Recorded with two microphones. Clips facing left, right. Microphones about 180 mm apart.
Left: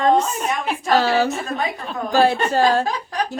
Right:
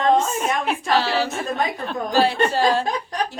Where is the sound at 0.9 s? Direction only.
45° left (ahead or behind).